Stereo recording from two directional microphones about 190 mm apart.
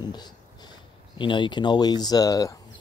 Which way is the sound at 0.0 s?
20° left (ahead or behind).